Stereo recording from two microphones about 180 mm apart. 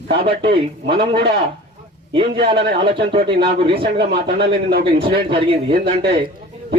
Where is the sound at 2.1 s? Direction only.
30° right (ahead or behind).